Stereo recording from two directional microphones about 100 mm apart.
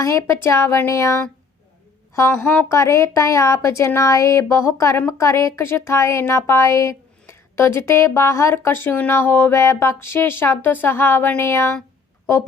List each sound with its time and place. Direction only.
0.0 s speech: 30° left (ahead or behind)
2.4 s speech: 15° left (ahead or behind)
2.6 s speech: 30° left (ahead or behind)